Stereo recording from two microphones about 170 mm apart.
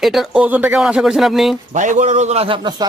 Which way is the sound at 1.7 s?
45° right (ahead or behind).